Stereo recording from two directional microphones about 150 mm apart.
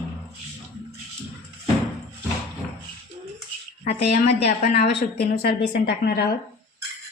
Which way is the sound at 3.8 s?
90° left.